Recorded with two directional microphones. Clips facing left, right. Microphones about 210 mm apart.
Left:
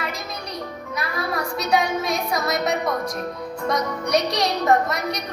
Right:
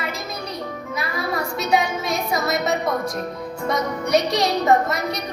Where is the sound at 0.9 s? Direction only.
Centre (ahead or behind).